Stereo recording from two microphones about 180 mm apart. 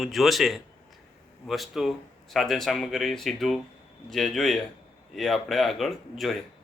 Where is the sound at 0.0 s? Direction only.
Centre (ahead or behind).